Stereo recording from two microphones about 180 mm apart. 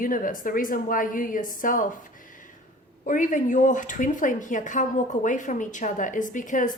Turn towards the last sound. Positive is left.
turn(degrees=45)  # may be behind; listen again after turning